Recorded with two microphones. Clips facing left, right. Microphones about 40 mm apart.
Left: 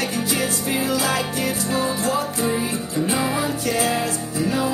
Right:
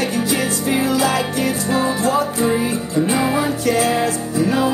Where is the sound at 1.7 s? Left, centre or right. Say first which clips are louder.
Right 5 dB; right.